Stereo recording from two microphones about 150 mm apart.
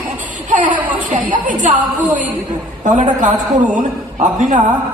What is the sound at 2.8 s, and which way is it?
A man's voice, 55° right (ahead or behind).